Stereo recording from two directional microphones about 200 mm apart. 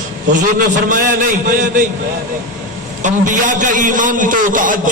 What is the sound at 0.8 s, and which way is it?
A man's voice, 45° right (ahead or behind).